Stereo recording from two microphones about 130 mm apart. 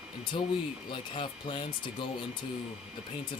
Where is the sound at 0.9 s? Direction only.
40° left (ahead or behind).